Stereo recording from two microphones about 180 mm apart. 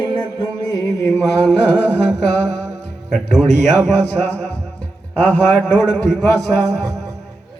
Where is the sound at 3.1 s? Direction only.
5° left (ahead or behind).